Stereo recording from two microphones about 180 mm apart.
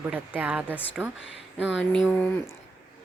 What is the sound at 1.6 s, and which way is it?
Speech, 85° left.